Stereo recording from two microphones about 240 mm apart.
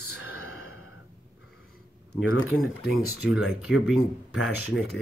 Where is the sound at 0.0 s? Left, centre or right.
Left.